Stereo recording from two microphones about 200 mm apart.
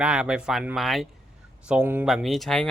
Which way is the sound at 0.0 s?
5° right (ahead or behind).